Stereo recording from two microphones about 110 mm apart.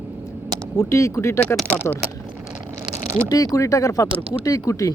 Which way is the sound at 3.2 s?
35° left (ahead or behind).